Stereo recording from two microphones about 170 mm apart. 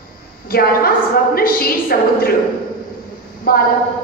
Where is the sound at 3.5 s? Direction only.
60° left (ahead or behind).